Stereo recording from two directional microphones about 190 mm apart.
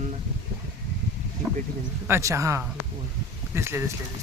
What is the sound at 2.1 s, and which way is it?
Speech, 15° right (ahead or behind).